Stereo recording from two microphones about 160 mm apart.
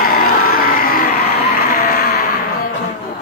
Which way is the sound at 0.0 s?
65° left (ahead or behind).